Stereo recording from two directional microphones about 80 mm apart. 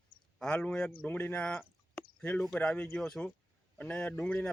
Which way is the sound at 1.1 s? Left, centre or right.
Left.